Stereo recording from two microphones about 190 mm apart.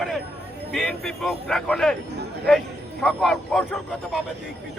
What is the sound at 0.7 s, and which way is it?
Speech, centre (ahead or behind).